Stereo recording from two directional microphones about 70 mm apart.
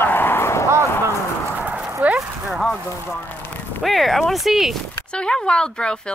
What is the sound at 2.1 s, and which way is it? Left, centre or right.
Horse, centre.